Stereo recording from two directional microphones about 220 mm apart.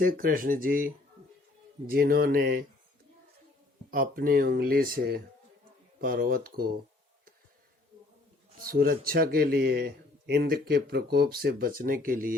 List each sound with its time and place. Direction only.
0.0 s speech: 40° right (ahead or behind)
3.9 s speech: 40° right (ahead or behind)
8.5 s speech: 40° right (ahead or behind)